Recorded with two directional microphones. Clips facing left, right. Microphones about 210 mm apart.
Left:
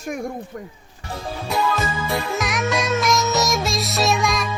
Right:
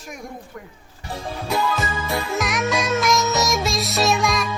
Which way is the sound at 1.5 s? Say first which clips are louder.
Left 1 dB; centre (ahead or behind).